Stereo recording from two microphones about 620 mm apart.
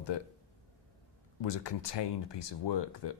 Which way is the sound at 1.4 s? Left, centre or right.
Left.